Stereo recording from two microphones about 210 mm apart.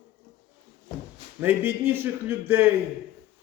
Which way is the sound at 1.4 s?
10° right (ahead or behind).